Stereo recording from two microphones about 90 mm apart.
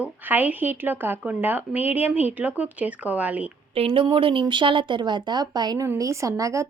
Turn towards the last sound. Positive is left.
turn(degrees=-35)  # may be behind; listen again after turning